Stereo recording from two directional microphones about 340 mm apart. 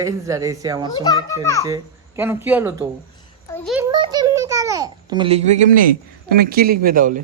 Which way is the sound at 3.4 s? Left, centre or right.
Centre.